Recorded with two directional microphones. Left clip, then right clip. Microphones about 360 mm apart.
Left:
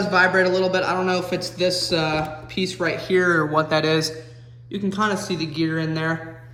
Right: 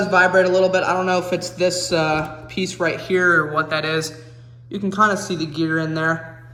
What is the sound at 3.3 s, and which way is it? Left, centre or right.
A man's voice, centre.